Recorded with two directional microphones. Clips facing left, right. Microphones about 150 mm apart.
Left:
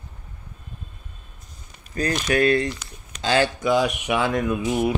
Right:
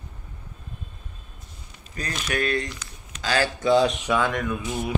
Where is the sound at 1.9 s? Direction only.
40° left (ahead or behind).